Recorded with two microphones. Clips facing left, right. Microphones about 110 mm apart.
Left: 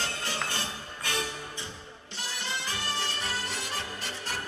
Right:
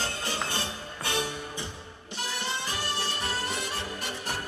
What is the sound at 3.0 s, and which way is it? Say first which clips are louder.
Music: right 2 dB; 20° right (ahead or behind).